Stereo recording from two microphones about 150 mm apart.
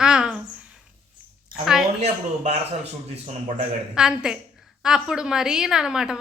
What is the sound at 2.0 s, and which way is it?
Speech, 45° right (ahead or behind).